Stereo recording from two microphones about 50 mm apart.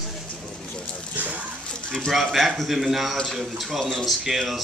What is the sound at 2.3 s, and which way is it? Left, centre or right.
A man's voice, centre.